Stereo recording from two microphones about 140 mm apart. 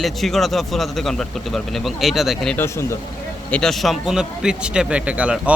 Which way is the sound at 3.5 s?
5° left (ahead or behind).